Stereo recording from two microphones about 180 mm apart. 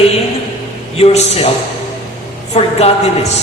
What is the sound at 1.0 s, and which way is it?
Speech, 35° left (ahead or behind).